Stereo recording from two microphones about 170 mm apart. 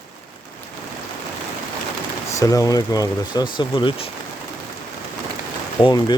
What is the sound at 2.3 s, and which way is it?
Speech, 20° left (ahead or behind).